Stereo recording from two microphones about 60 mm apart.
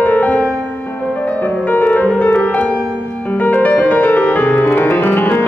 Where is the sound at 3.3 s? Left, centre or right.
Left.